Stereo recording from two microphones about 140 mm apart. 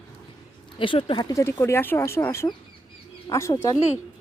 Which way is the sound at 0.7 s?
40° left (ahead or behind).